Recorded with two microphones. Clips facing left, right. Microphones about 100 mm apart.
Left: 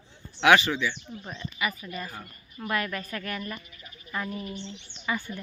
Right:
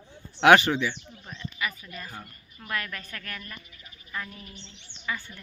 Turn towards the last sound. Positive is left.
turn(degrees=15)  # may be behind; listen again after turning